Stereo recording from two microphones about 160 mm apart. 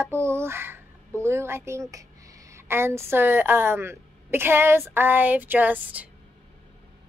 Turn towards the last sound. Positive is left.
turn(degrees=-10)  # may be behind; listen again after turning